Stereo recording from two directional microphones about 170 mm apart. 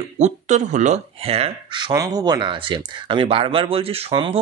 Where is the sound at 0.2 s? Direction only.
45° right (ahead or behind).